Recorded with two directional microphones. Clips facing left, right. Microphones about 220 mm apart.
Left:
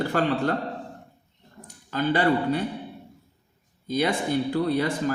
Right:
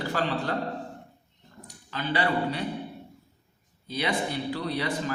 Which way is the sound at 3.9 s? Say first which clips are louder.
Left 5 dB; 45° left (ahead or behind).